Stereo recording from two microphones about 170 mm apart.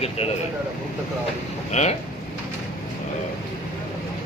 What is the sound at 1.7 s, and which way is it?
Speech, 40° left (ahead or behind).